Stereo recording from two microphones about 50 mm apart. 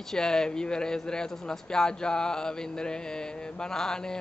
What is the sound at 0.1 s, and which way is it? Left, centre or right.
Speech, centre.